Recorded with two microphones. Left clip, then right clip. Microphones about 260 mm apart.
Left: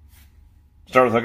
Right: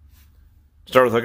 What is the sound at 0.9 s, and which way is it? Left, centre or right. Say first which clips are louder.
Speech: right 1 dB; right.